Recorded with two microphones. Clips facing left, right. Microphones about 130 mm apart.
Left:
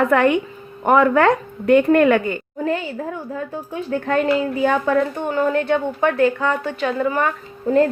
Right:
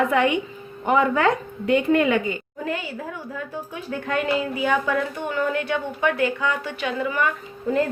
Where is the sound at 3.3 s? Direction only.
40° left (ahead or behind).